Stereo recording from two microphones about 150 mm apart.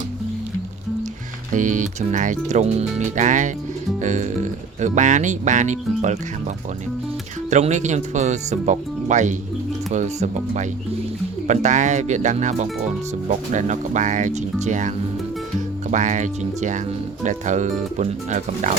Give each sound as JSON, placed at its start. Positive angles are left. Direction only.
{"t": 1.5, "sound": "speech", "side_deg": -55}
{"t": 7.5, "sound": "speech", "side_deg": -50}